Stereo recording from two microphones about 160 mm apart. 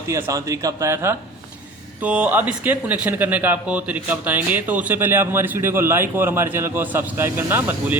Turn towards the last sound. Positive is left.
turn(degrees=-15)  # may be behind; listen again after turning